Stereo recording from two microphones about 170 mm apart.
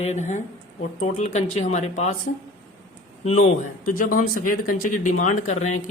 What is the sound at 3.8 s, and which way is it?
Speech, 55° left (ahead or behind).